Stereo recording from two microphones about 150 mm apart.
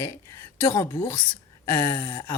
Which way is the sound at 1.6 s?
20° left (ahead or behind).